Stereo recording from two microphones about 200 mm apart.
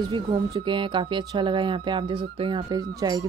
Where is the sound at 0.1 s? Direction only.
25° right (ahead or behind).